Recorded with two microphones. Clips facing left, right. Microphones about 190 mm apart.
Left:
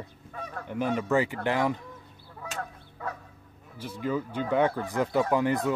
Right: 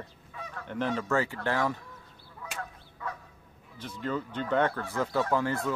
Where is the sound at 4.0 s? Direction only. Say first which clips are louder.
Left 3 dB; 10° left (ahead or behind).